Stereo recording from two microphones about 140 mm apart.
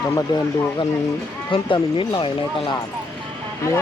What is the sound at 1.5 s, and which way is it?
Speech, 35° left (ahead or behind).